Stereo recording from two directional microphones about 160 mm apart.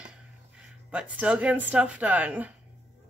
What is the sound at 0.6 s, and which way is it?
Speech, 5° right (ahead or behind).